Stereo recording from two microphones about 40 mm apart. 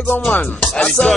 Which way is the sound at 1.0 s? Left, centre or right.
Left.